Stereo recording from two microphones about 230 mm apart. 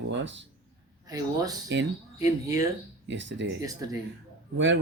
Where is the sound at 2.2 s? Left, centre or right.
Centre.